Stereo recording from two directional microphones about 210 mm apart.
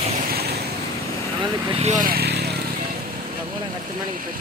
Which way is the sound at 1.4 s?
25° right (ahead or behind).